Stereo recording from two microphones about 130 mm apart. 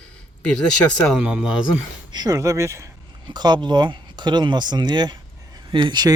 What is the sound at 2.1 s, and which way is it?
Speech, 30° right (ahead or behind).